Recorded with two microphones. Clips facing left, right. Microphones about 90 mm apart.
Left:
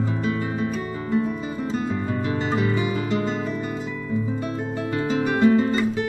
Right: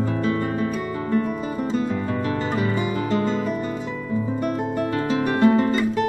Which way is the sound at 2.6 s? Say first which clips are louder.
Even; 40° right (ahead or behind).